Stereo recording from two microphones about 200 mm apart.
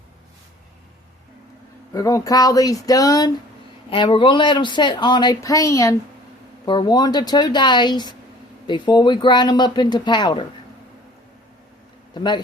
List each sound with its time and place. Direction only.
1.9 s speech: 15° left (ahead or behind)
12.1 s speech: 20° left (ahead or behind)